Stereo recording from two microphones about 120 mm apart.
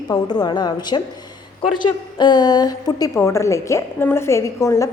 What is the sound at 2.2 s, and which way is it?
A woman's voice, 35° left (ahead or behind).